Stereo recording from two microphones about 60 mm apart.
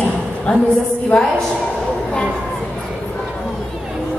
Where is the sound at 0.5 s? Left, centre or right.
Left.